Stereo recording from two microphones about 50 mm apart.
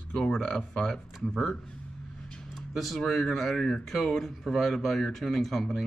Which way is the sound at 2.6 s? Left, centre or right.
Centre.